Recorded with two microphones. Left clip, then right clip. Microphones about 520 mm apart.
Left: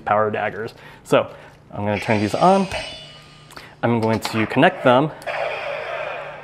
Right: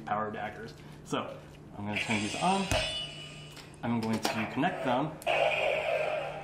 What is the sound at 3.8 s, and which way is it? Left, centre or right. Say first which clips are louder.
Speech: left 12 dB; left.